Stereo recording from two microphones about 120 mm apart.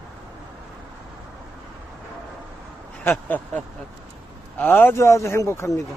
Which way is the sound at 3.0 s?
15° left (ahead or behind).